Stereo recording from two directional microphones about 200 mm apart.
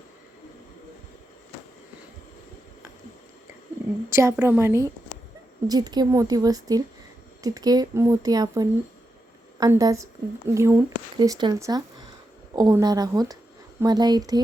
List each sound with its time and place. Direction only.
4.1 s speech: 15° right (ahead or behind)